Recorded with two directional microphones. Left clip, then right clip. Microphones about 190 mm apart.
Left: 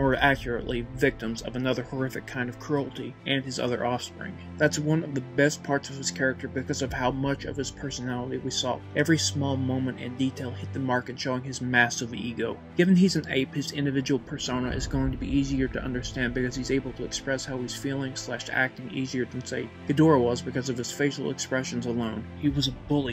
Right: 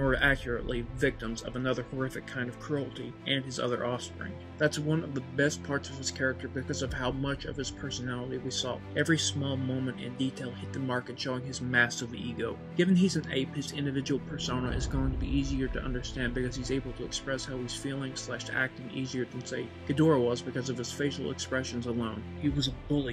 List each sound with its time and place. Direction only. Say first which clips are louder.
0.0 s speech: left 4 dB; 20° left (ahead or behind)